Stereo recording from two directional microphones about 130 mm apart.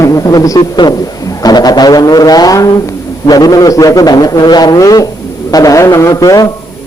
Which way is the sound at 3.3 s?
30° left (ahead or behind).